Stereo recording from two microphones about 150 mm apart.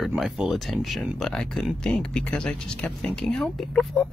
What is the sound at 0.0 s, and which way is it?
Speech, 5° right (ahead or behind).